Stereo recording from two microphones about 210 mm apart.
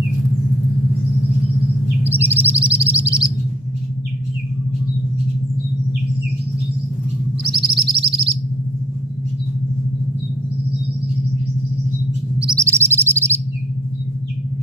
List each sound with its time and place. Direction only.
2.0 s music: 10° right (ahead or behind)
7.4 s music: 25° right (ahead or behind)
12.4 s chirp: 10° right (ahead or behind)